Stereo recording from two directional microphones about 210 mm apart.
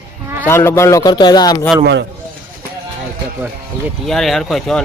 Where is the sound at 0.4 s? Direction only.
10° left (ahead or behind).